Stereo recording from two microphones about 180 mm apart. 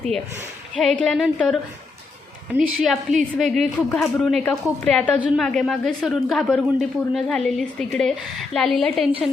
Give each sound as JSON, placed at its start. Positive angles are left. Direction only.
{"t": 0.8, "sound": "a woman's voice", "side_deg": 5}
{"t": 2.6, "sound": "a woman's voice", "side_deg": 0}